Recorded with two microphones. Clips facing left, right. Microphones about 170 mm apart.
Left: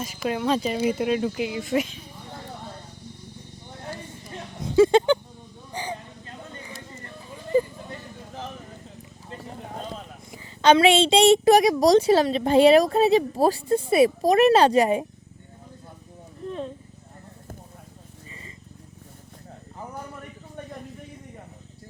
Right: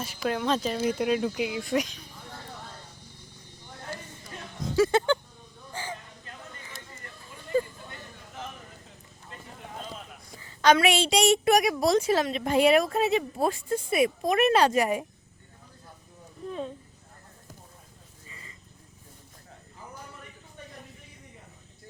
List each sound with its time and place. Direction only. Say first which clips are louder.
0.3 s speech: left 3 dB; 5° left (ahead or behind)
4.8 s a sound: left 6 dB; 20° left (ahead or behind)
10.3 s a woman's voice: left 4 dB; 20° left (ahead or behind)
18.3 s vehicle: left 5 dB; 25° left (ahead or behind)